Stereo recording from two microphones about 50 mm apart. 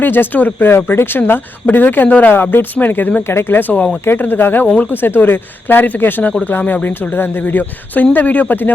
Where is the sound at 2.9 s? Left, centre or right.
Left.